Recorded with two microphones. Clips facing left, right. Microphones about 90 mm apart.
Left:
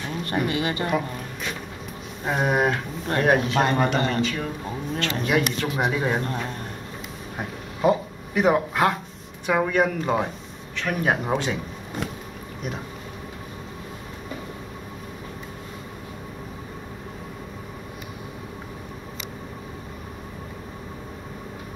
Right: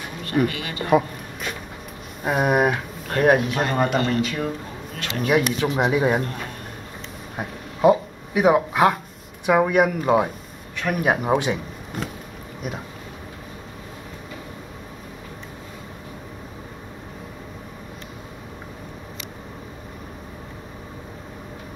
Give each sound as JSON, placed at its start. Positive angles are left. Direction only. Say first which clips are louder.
{"t": 0.2, "sound": "speech", "louder": "right 2 dB", "side_deg": 25}
{"t": 2.2, "sound": "speech", "louder": "right 3 dB", "side_deg": -10}
{"t": 7.3, "sound": "a sound", "louder": "right 2 dB", "side_deg": -5}
{"t": 9.5, "sound": "speech", "louder": "right 4 dB", "side_deg": -10}